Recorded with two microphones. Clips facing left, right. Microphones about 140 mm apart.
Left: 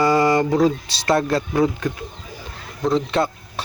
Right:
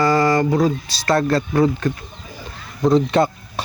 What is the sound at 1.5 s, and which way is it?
Speech, 5° left (ahead or behind).